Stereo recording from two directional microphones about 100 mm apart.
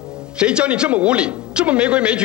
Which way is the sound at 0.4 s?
10° right (ahead or behind).